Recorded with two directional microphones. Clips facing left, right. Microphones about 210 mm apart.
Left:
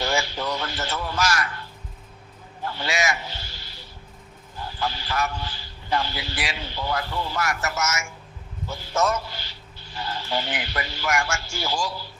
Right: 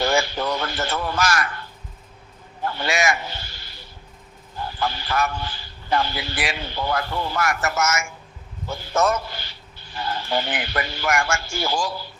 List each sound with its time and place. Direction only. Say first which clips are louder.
0.0 s a sound: right 4 dB; 55° right (ahead or behind)
2.6 s a man's voice: right 3 dB; 55° right (ahead or behind)
4.8 s speech: right 3 dB; 55° right (ahead or behind)